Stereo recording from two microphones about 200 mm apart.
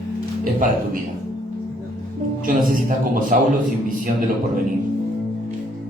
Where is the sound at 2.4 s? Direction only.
45° right (ahead or behind).